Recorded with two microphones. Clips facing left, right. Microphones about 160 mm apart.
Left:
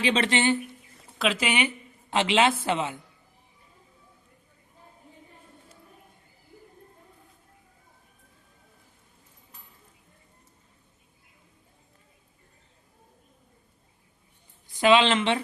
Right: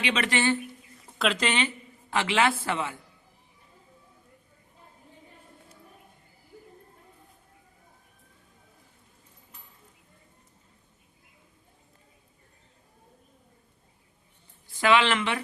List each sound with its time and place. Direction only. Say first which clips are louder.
0.0 s speech: left 3 dB; 30° left (ahead or behind)
1.2 s a man's voice: left 1 dB; 5° left (ahead or behind); by 3.0 s 20° left (ahead or behind)
14.7 s speech: left 3 dB; 20° left (ahead or behind)